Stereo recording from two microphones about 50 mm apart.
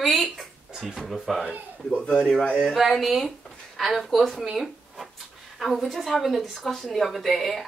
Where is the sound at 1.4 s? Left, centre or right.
Right.